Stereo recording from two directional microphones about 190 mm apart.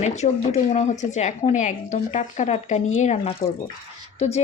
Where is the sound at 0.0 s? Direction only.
35° left (ahead or behind).